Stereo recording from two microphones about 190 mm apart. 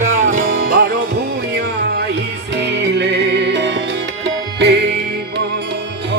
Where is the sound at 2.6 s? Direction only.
65° right (ahead or behind).